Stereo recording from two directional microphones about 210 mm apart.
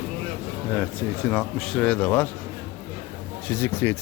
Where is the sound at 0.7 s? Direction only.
5° left (ahead or behind).